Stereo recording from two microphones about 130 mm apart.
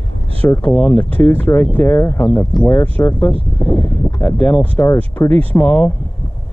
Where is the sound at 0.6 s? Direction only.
5° left (ahead or behind).